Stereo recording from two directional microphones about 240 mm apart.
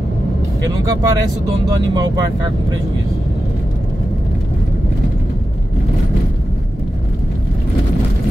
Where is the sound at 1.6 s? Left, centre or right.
Centre.